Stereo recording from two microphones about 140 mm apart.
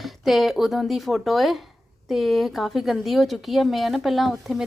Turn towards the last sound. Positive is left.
turn(degrees=0)  # may be behind; listen again after turning